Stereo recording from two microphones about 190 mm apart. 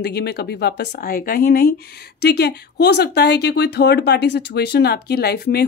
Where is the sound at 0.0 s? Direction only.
60° left (ahead or behind).